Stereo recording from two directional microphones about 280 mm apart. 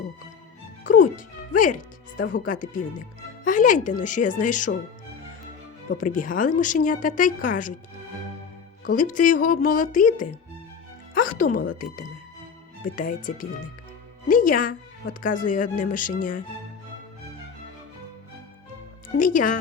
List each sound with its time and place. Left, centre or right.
0.9 s a woman's voice: left
6.0 s a woman's voice: left
8.9 s a woman's voice: left
12.8 s a woman's voice: left
19.1 s a woman's voice: left